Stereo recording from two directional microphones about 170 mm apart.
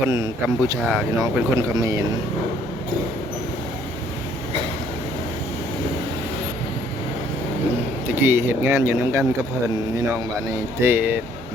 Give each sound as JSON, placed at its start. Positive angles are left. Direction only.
{"t": 0.0, "sound": "speech", "side_deg": -15}
{"t": 8.2, "sound": "speech", "side_deg": -15}
{"t": 10.8, "sound": "speech", "side_deg": -15}